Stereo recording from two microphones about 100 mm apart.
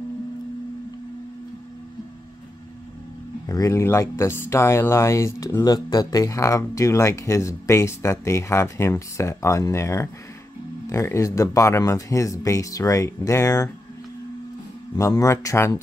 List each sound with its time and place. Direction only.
3.4 s speech: 35° left (ahead or behind)
5.6 s speech: 40° left (ahead or behind)
15.0 s speech: 30° left (ahead or behind)